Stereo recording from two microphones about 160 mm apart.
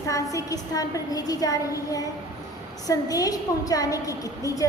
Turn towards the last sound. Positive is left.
turn(degrees=20)  # may be behind; listen again after turning